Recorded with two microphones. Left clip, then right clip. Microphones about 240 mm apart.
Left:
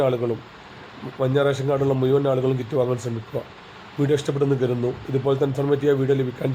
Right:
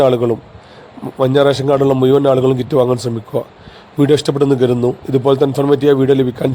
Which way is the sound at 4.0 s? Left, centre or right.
Right.